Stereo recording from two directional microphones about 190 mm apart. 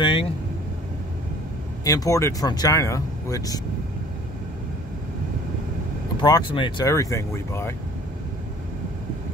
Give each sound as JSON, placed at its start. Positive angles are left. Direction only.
{"t": 0.0, "sound": "vehicle", "side_deg": 25}
{"t": 1.9, "sound": "speech", "side_deg": 15}
{"t": 6.2, "sound": "speech", "side_deg": 25}